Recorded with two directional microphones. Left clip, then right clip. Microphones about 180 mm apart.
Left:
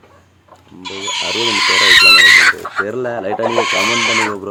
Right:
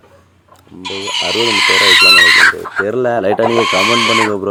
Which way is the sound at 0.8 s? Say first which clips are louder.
Right 2 dB; 65° right (ahead or behind).